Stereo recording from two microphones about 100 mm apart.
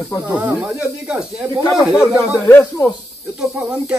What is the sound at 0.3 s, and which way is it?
Speech, 15° right (ahead or behind).